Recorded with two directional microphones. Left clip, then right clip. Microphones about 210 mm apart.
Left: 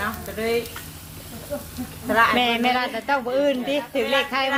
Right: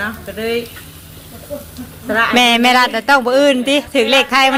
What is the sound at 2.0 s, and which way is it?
Speech, 20° right (ahead or behind).